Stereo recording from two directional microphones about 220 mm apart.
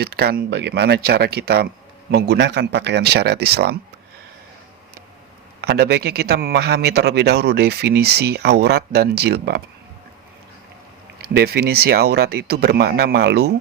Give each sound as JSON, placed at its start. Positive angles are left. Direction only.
{"t": 0.0, "sound": "a man's voice", "side_deg": -45}
{"t": 5.6, "sound": "a man's voice", "side_deg": -50}
{"t": 11.2, "sound": "a man's voice", "side_deg": -45}